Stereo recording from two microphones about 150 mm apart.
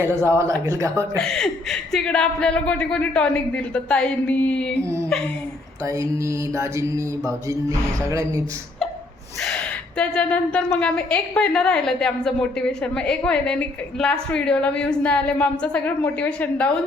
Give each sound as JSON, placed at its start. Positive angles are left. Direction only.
{"t": 0.0, "sound": "mantra", "side_deg": -15}
{"t": 1.1, "sound": "a woman's voice", "side_deg": 5}
{"t": 5.8, "sound": "mantra", "side_deg": -20}
{"t": 9.4, "sound": "a woman's voice", "side_deg": 10}